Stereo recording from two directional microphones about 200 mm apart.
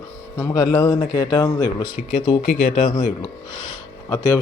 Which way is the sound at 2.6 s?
30° left (ahead or behind).